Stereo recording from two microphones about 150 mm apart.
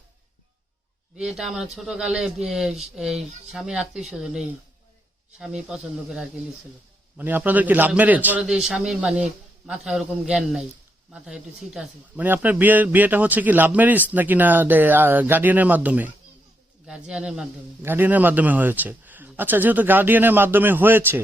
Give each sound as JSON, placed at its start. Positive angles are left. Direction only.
{"t": 1.1, "sound": "a man's voice", "side_deg": -5}